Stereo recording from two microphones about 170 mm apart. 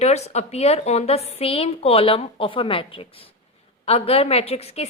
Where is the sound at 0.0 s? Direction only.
40° left (ahead or behind).